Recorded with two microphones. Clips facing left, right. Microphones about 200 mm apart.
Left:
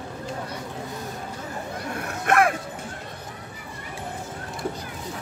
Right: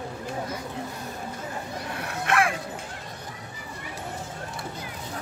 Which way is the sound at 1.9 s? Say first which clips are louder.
Left 4 dB; 45° left (ahead or behind).